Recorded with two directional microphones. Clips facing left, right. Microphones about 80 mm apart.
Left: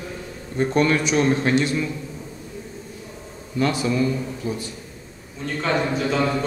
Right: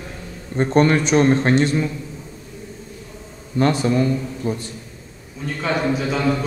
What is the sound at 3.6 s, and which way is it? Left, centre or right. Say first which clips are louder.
Speech: right 3 dB; right.